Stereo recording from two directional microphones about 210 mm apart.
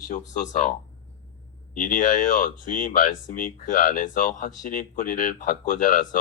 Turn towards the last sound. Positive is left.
turn(degrees=40)  # may be behind; listen again after turning